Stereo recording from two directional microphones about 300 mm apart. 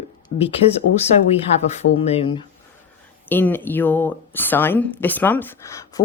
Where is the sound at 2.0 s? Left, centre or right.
Centre.